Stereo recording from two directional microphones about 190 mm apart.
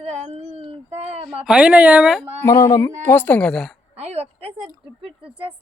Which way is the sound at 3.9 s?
35° right (ahead or behind).